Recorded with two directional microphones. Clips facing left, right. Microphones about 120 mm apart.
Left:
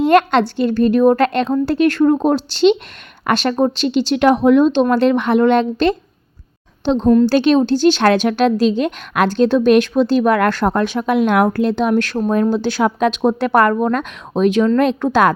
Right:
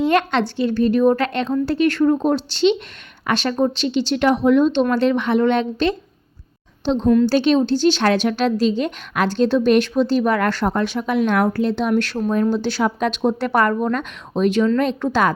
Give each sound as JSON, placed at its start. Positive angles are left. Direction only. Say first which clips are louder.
{"t": 0.1, "sound": "a woman's voice", "louder": "left 5 dB", "side_deg": 50}